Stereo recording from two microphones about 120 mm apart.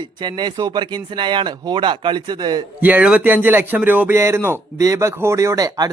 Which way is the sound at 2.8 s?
15° right (ahead or behind).